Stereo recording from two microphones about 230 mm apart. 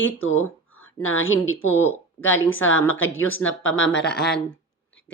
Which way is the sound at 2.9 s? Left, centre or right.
Left.